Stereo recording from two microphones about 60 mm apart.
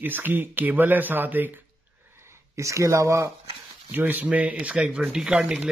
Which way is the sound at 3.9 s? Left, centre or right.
Right.